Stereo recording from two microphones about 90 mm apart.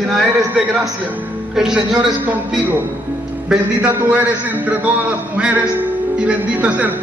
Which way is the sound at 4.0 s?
20° right (ahead or behind).